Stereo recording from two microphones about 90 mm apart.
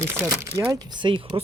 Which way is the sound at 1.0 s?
70° right (ahead or behind).